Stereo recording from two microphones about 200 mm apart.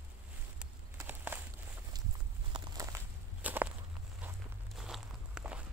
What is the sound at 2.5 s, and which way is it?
Walk, 20° right (ahead or behind).